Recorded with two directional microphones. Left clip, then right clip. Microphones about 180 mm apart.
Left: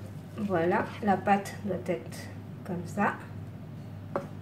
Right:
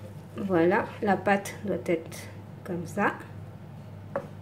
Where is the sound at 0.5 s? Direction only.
45° right (ahead or behind).